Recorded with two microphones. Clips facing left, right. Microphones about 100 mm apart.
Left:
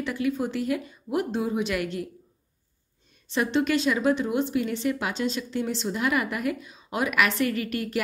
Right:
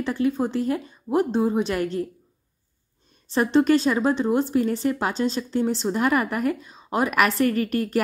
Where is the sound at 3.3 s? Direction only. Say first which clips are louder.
Right 5 dB; 40° right (ahead or behind).